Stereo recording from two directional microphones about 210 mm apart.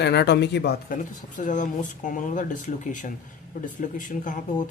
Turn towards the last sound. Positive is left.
turn(degrees=40)  # may be behind; listen again after turning